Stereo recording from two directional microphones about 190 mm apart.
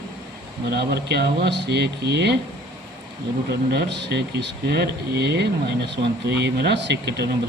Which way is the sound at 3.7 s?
65° right (ahead or behind).